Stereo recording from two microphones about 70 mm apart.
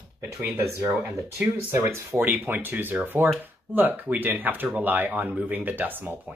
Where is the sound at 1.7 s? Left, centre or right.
Right.